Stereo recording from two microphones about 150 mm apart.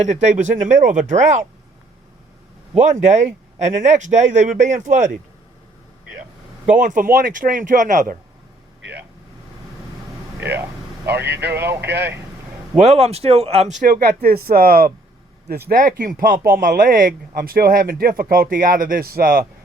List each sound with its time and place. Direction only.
0.0 s speech: 50° right (ahead or behind)
2.8 s speech: 50° right (ahead or behind)
6.7 s speech: 60° right (ahead or behind)
11.1 s speech: 90° right
11.5 s speech: 15° right (ahead or behind)
12.7 s speech: 45° right (ahead or behind)
14.1 s speech: 85° right; by 16.9 s 60° right (ahead or behind)
17.3 s speech: 80° right